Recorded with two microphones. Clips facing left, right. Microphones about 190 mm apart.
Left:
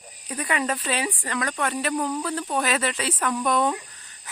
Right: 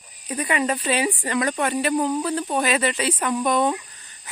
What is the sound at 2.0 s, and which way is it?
Speech, 15° right (ahead or behind).